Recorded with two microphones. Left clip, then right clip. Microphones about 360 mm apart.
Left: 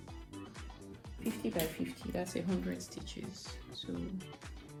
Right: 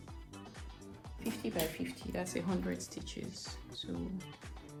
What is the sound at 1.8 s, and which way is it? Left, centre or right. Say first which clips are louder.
Speech: left 1 dB; centre.